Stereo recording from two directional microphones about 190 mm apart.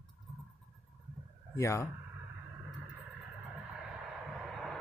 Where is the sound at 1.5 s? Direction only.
15° left (ahead or behind).